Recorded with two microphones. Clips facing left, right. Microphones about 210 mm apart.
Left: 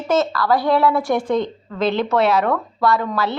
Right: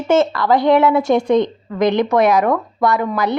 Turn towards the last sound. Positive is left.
turn(degrees=-15)  # may be behind; listen again after turning